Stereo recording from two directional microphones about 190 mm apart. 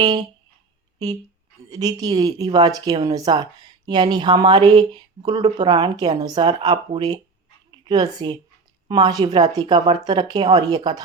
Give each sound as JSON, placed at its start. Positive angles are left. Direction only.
{"t": 0.0, "sound": "speech", "side_deg": -20}